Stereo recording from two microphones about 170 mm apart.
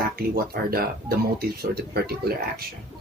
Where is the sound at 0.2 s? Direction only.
60° right (ahead or behind).